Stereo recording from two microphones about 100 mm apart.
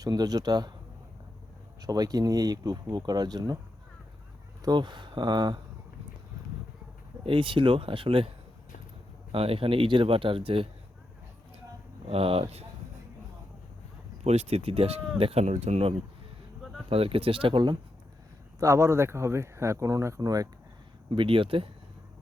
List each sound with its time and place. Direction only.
0.0 s speech: 40° right (ahead or behind)
1.8 s speech: 40° right (ahead or behind)
4.6 s speech: 50° right (ahead or behind)
7.3 s speech: 55° right (ahead or behind)
9.3 s speech: 70° right (ahead or behind)
12.0 s speech: 70° right (ahead or behind); by 12.6 s 85° right
14.3 s speech: 90° right
16.9 s speech: 70° right (ahead or behind); by 17.7 s 50° right (ahead or behind)
18.6 s speech: 30° right (ahead or behind)
21.1 s speech: 60° right (ahead or behind)